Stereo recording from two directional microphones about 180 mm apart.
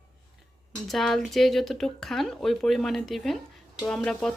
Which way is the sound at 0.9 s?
Centre (ahead or behind).